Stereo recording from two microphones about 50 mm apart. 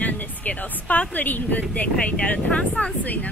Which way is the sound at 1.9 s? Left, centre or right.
Left.